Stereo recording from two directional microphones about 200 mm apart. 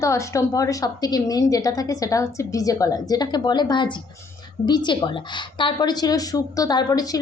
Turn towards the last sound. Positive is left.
turn(degrees=20)  # may be behind; listen again after turning